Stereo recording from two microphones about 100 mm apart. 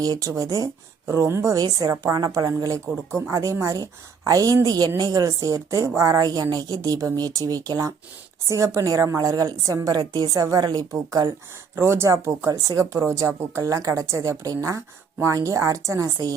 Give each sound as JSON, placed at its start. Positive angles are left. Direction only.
{"t": 0.0, "sound": "a woman's voice", "side_deg": -35}
{"t": 11.8, "sound": "a woman's voice", "side_deg": -25}